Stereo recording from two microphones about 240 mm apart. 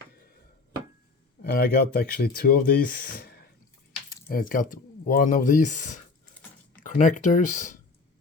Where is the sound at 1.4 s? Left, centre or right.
Left.